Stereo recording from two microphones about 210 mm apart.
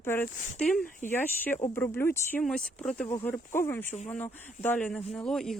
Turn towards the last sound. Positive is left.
turn(degrees=0)  # may be behind; listen again after turning